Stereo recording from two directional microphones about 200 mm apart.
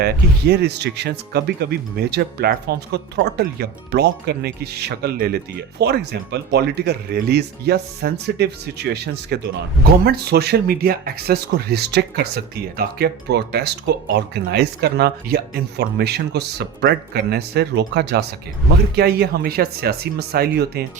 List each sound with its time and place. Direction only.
0.0 s speech: 55° right (ahead or behind)